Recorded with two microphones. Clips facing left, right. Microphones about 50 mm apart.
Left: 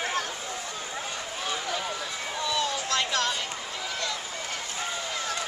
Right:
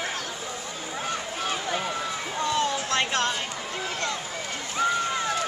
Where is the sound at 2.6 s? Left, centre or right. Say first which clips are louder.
Right 2 dB; right.